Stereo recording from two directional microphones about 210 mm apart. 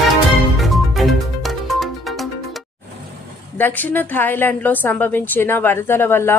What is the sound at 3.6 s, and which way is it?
A woman's voice, 10° left (ahead or behind).